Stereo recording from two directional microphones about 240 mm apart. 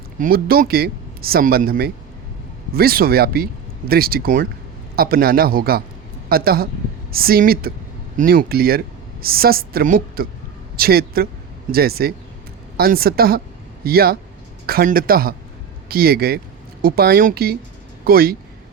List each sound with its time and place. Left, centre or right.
0.2 s speech: right